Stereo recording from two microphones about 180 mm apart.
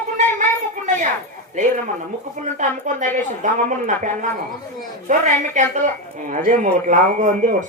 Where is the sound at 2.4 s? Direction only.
45° right (ahead or behind).